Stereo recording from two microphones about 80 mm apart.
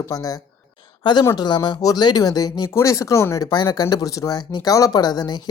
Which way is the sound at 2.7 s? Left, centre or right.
Left.